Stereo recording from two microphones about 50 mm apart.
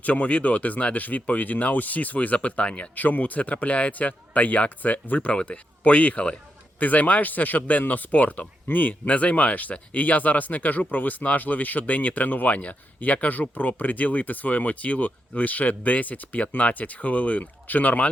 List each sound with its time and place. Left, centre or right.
0.0 s speech: left
2.9 s speech: left